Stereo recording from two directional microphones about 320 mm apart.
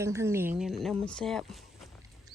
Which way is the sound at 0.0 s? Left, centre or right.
Centre.